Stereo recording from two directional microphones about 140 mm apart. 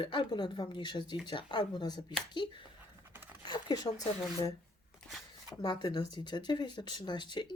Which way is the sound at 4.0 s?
25° left (ahead or behind).